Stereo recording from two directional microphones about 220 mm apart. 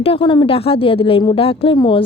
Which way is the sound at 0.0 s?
25° left (ahead or behind).